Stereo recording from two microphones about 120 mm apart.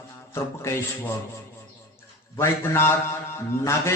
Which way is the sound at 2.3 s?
20° left (ahead or behind).